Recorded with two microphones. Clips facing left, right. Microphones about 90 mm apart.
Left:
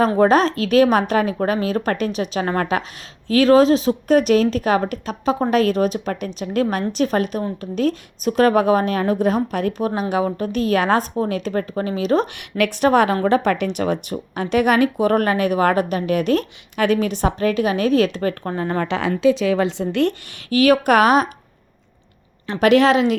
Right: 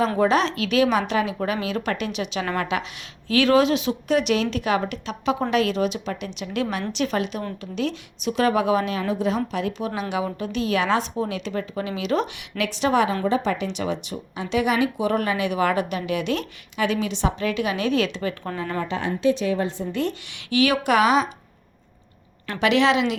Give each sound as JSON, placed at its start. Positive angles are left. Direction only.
{"t": 0.2, "sound": "a woman's voice", "side_deg": 45}
{"t": 18.9, "sound": "a woman's voice", "side_deg": 90}
{"t": 20.3, "sound": "speech", "side_deg": 45}
{"t": 22.6, "sound": "speech", "side_deg": 45}